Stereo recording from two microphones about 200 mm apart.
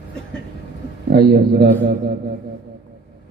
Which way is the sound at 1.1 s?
50° right (ahead or behind).